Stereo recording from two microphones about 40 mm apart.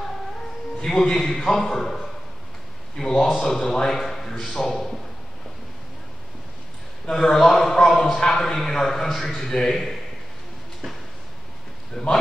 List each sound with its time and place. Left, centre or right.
0.7 s a man's voice: centre
7.1 s a man's voice: centre
11.9 s a man's voice: centre